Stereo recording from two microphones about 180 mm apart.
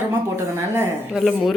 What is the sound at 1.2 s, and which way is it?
Speech, centre (ahead or behind).